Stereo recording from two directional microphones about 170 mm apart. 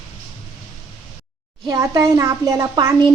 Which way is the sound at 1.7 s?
20° right (ahead or behind).